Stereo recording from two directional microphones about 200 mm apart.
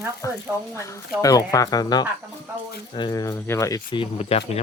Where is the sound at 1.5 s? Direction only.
15° left (ahead or behind).